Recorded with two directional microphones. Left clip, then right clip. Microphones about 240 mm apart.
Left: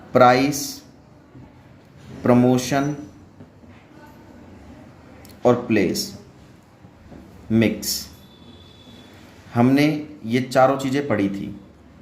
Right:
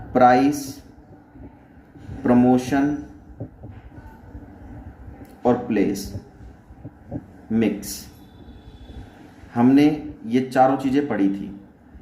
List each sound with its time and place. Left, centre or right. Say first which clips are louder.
0.1 s a man's voice: left 1 dB; left
2.2 s a man's voice: left 1 dB; left
5.4 s a man's voice: left 2 dB; left
7.5 s a man's voice: left 3 dB; left
9.5 s a man's voice: right 1 dB; left